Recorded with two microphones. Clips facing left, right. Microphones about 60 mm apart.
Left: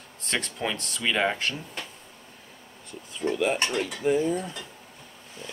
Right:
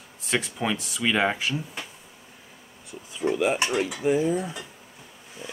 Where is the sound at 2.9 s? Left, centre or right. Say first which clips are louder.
Right 2 dB; centre.